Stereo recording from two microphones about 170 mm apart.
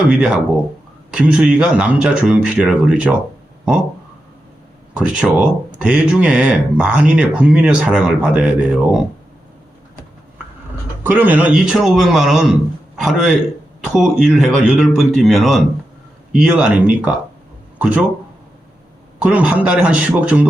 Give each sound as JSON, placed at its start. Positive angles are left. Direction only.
{"t": 0.1, "sound": "speech", "side_deg": -5}
{"t": 4.9, "sound": "speech", "side_deg": -5}
{"t": 11.0, "sound": "a man's voice", "side_deg": -10}
{"t": 19.2, "sound": "a man's voice", "side_deg": -5}